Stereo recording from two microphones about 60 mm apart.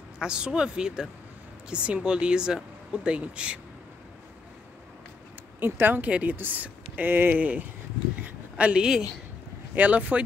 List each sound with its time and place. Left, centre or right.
0.2 s speech: centre
5.6 s speech: right
8.2 s a sound: right
9.8 s speech: right